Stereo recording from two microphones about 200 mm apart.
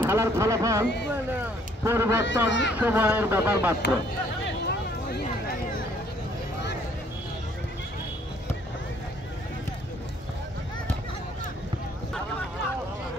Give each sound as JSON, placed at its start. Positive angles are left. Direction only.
{"t": 0.0, "sound": "speech", "side_deg": -15}
{"t": 2.2, "sound": "speech", "side_deg": 65}
{"t": 2.7, "sound": "speech", "side_deg": -10}
{"t": 4.5, "sound": "a sound", "side_deg": 55}